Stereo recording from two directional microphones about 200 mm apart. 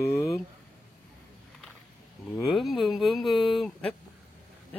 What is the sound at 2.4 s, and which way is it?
Speech, centre (ahead or behind).